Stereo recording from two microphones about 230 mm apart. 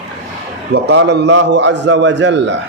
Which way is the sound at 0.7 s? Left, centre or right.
Right.